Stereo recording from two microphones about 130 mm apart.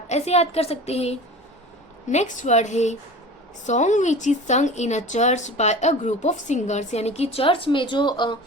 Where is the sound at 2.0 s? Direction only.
70° left (ahead or behind); by 8.4 s 35° left (ahead or behind).